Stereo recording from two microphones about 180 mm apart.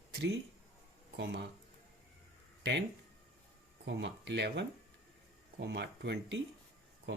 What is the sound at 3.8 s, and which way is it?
Speech, 75° right (ahead or behind).